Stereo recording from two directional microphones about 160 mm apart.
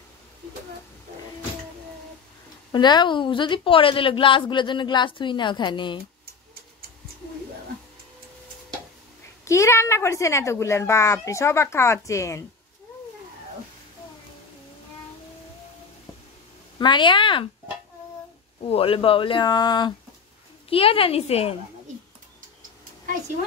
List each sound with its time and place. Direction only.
2.7 s a woman's voice: 25° left (ahead or behind)
9.4 s speech: 20° left (ahead or behind)
16.7 s speech: 30° left (ahead or behind)
18.6 s speech: 35° left (ahead or behind)